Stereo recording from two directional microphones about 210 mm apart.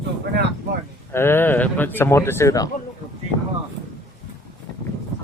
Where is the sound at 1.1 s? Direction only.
10° left (ahead or behind).